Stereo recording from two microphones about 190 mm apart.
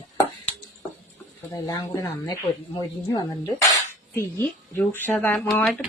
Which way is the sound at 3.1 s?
20° left (ahead or behind).